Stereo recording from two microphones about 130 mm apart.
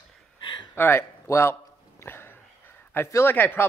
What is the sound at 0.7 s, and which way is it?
Speech, 15° left (ahead or behind).